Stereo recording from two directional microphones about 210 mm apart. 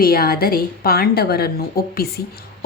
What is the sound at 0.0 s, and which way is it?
A woman's voice, 45° left (ahead or behind).